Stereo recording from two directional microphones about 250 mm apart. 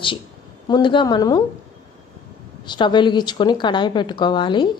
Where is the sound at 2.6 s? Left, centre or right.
Centre.